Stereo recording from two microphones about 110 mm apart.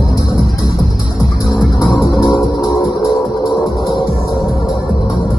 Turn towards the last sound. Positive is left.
turn(degrees=0)  # may be behind; listen again after turning